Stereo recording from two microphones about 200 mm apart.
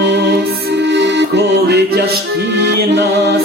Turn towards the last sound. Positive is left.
turn(degrees=-55)  # may be behind; listen again after turning